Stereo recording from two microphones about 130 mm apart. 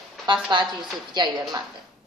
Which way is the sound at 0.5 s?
35° right (ahead or behind).